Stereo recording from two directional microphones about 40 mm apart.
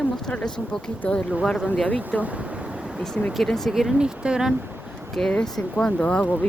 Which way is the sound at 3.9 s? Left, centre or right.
Right.